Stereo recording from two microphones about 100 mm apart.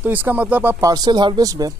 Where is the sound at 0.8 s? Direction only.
40° right (ahead or behind).